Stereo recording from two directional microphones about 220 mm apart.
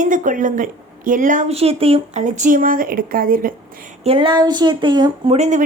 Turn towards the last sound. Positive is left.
turn(degrees=-30)  # may be behind; listen again after turning